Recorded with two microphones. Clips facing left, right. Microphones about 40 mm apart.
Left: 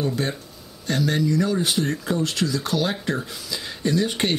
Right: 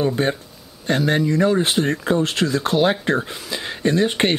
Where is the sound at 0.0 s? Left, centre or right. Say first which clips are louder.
Right 5 dB; right.